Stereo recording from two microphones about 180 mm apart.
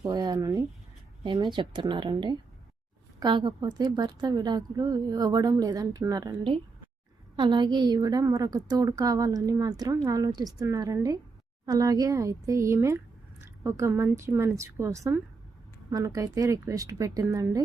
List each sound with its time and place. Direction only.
0.0 s a woman's voice: 25° right (ahead or behind)